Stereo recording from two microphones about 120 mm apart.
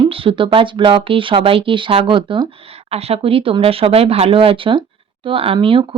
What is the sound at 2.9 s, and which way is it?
Speech, 55° right (ahead or behind).